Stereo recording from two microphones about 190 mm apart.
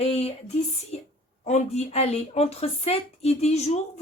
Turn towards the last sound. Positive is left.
turn(degrees=35)  # may be behind; listen again after turning